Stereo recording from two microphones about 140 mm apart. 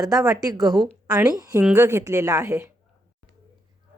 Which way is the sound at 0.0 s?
25° right (ahead or behind).